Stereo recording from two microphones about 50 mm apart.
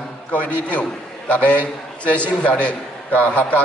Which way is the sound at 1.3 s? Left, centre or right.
Left.